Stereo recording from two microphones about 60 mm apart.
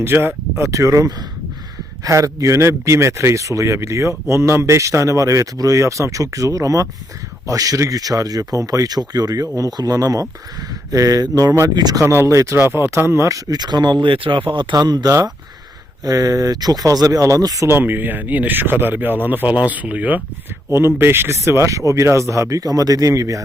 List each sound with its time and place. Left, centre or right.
0.0 s a man's voice: right
10.9 s speech: right
12.0 s speech: right
13.1 s speech: right
14.7 s speech: right
16.0 s speech: right
17.7 s speech: right
20.7 s speech: right
21.7 s a man's voice: right